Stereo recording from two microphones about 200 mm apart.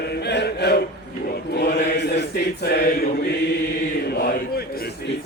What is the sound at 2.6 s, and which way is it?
Choir, 50° left (ahead or behind).